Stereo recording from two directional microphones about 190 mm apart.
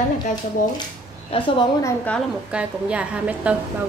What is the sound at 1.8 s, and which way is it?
Speech, 10° left (ahead or behind).